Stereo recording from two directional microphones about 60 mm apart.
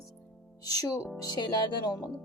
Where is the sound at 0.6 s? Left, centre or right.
Left.